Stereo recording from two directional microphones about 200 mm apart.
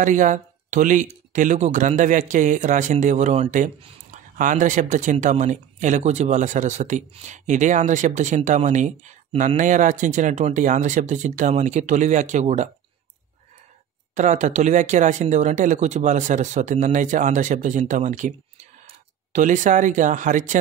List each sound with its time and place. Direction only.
0.0 s a man's voice: 40° right (ahead or behind)
14.1 s a man's voice: 35° right (ahead or behind)